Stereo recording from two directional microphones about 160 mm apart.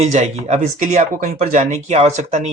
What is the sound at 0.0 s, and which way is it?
Speech, 50° right (ahead or behind).